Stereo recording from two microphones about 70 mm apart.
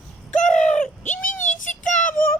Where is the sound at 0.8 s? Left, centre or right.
Left.